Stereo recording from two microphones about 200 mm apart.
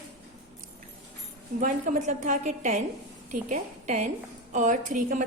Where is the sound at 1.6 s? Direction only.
40° right (ahead or behind).